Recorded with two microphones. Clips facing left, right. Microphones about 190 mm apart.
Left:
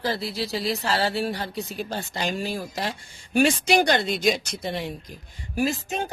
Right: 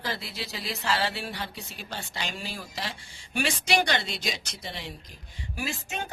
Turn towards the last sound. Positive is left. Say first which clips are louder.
# left 8 dB
turn(degrees=35)  # may be behind; listen again after turning